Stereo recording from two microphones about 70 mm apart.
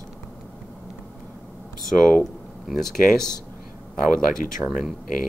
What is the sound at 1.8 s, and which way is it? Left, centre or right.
Speech, centre.